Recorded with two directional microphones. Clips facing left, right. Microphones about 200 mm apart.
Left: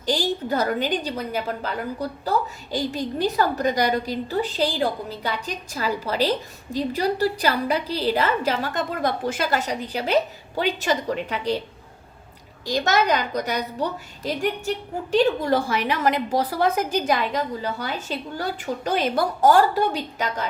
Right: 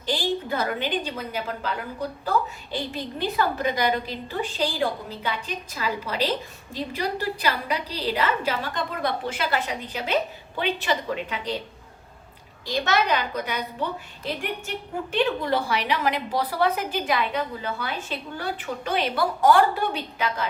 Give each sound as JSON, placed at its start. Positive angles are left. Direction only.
{"t": 0.0, "sound": "a woman's voice", "side_deg": 45}
{"t": 12.6, "sound": "a woman's voice", "side_deg": 45}
{"t": 15.1, "sound": "a woman's voice", "side_deg": 40}